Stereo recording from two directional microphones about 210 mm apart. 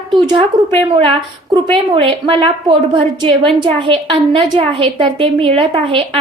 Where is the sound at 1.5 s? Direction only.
25° right (ahead or behind).